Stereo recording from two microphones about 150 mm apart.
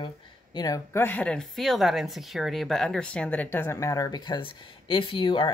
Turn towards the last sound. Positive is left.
turn(degrees=30)  # may be behind; listen again after turning